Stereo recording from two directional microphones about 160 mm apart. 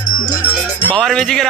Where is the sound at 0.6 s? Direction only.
5° left (ahead or behind).